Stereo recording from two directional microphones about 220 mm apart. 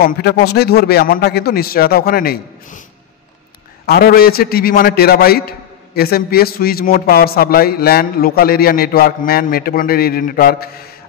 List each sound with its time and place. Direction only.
0.0 s a man's voice: 45° left (ahead or behind)
3.8 s a man's voice: 45° left (ahead or behind)